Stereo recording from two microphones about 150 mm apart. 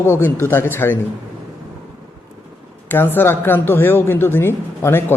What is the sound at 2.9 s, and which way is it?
A man's voice, 15° left (ahead or behind).